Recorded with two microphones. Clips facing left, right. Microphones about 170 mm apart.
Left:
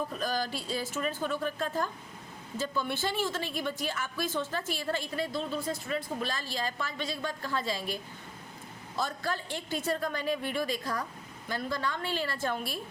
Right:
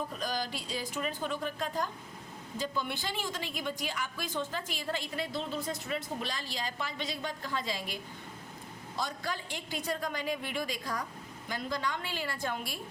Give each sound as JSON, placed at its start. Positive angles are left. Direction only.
{"t": 0.4, "sound": "a sound", "side_deg": 50}
{"t": 0.8, "sound": "a woman's voice", "side_deg": -15}
{"t": 9.0, "sound": "a woman's voice", "side_deg": -15}